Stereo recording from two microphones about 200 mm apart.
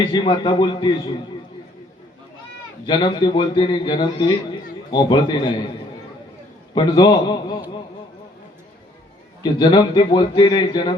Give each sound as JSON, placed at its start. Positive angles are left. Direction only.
{"t": 0.1, "sound": "a man's voice", "side_deg": 25}
{"t": 2.8, "sound": "a man's voice", "side_deg": 20}
{"t": 6.7, "sound": "a man's voice", "side_deg": 20}
{"t": 9.4, "sound": "a man's voice", "side_deg": 20}